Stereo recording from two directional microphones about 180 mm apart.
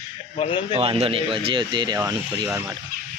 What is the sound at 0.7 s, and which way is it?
A man's voice, 30° right (ahead or behind).